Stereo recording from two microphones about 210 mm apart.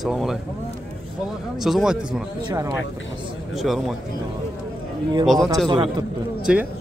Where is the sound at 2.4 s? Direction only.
15° right (ahead or behind).